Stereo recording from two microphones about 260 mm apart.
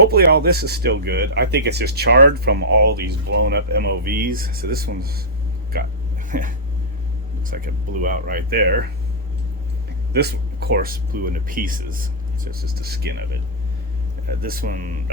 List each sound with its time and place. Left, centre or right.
0.1 s speech: right
6.3 s speech: right
7.5 s speech: right
10.1 s speech: right
14.3 s speech: right